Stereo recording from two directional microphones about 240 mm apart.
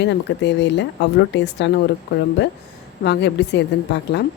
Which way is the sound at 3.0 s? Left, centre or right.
Left.